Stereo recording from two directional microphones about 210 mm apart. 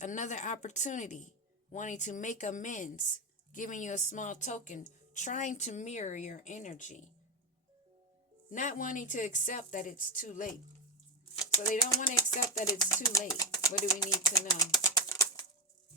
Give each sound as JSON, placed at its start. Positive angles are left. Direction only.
{"t": 0.0, "sound": "speech", "side_deg": 35}
{"t": 8.4, "sound": "speech", "side_deg": 40}
{"t": 11.7, "sound": "speech", "side_deg": 40}
{"t": 12.1, "sound": "speech", "side_deg": 15}
{"t": 14.0, "sound": "bird", "side_deg": 15}